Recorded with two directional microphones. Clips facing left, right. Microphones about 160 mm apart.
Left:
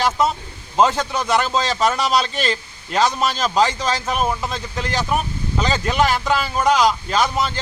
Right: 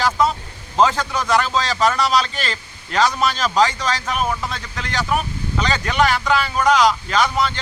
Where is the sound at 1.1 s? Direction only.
25° left (ahead or behind).